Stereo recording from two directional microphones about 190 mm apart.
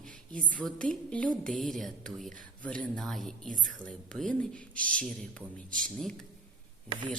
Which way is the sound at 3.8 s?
5° left (ahead or behind).